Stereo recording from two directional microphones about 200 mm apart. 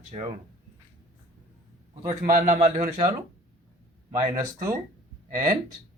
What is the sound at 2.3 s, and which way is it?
Speech, 40° right (ahead or behind).